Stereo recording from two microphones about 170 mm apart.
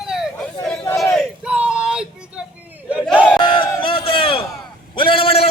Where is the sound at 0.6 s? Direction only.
15° left (ahead or behind).